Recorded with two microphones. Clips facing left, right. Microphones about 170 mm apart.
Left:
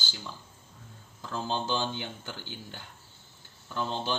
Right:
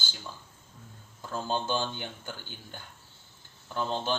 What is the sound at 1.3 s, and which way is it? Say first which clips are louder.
Speech: right 1 dB; 50° right (ahead or behind).